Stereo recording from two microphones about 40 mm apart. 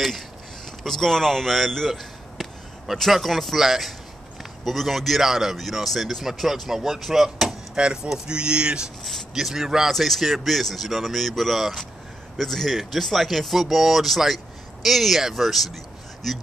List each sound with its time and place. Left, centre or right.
0.7 s speech: centre
1.9 s a sound: centre
3.1 s speech: centre
7.7 s speech: right
9.3 s speech: centre
9.9 s speech: centre